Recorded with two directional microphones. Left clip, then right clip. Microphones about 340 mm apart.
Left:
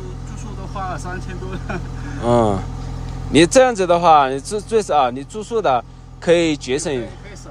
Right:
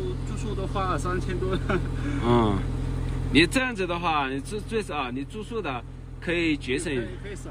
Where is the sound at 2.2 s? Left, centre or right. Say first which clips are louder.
Left 8 dB; centre.